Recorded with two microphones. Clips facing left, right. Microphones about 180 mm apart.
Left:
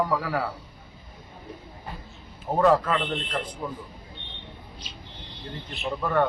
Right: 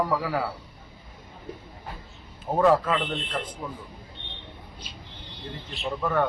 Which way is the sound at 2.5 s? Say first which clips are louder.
Even; centre (ahead or behind).